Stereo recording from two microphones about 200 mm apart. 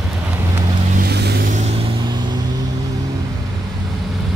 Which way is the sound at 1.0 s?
55° right (ahead or behind).